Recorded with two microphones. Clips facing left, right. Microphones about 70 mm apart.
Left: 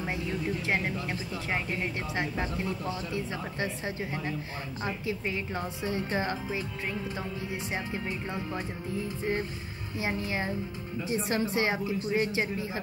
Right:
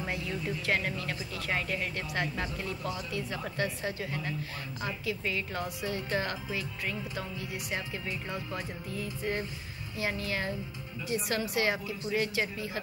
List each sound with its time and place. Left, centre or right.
0.7 s speech: left